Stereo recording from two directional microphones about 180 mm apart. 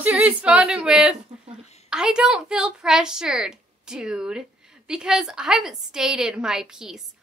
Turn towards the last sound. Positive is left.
turn(degrees=-5)  # may be behind; listen again after turning